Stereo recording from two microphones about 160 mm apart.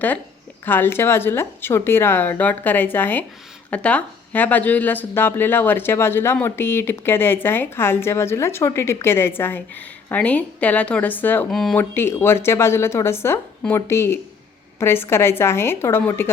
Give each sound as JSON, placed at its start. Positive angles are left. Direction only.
{"t": 0.6, "sound": "speech", "side_deg": 15}
{"t": 11.5, "sound": "speech", "side_deg": 0}
{"t": 11.8, "sound": "speech", "side_deg": 15}